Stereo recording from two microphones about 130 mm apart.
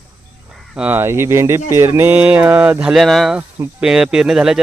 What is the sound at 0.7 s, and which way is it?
Speech, 10° right (ahead or behind).